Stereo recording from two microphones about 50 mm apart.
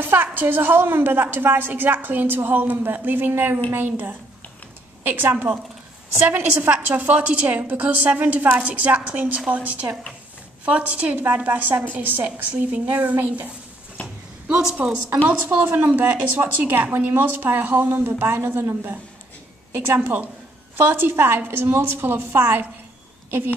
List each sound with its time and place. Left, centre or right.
0.0 s a woman's voice: right
6.7 s a woman's voice: right
14.0 s speech: left
14.8 s a woman's voice: right
18.4 s a woman's voice: right
19.9 s a woman's voice: right